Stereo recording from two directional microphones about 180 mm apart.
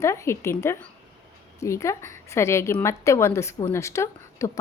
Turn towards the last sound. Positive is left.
turn(degrees=15)  # may be behind; listen again after turning